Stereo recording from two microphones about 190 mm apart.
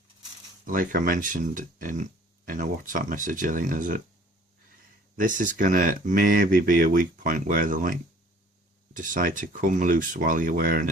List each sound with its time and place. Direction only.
0.6 s speech: 45° right (ahead or behind)
5.1 s speech: 45° right (ahead or behind)